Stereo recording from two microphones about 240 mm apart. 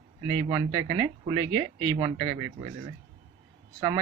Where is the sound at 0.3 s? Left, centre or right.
Centre.